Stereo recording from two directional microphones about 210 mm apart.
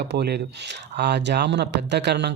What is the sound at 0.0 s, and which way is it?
Speech, 50° right (ahead or behind).